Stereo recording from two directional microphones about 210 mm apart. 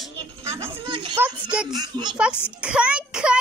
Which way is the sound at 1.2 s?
10° right (ahead or behind).